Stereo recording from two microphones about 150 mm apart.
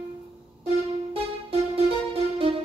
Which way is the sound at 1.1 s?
40° right (ahead or behind).